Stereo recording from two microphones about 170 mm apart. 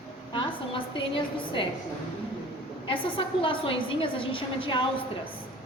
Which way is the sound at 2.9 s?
30° left (ahead or behind).